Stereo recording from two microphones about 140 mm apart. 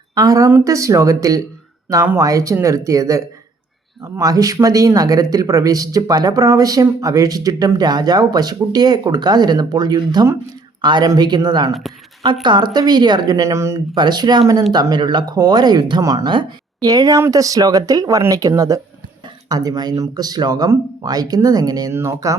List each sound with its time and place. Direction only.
0.1 s speech: 25° right (ahead or behind)